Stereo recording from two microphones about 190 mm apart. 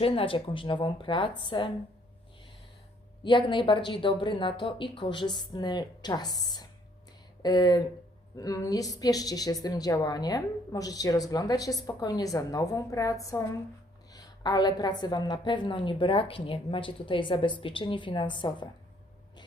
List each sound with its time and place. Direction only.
0.0 s a woman's voice: 30° left (ahead or behind)
3.2 s a woman's voice: 25° left (ahead or behind)